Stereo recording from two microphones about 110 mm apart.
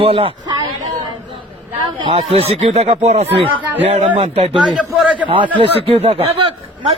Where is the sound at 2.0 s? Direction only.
60° right (ahead or behind).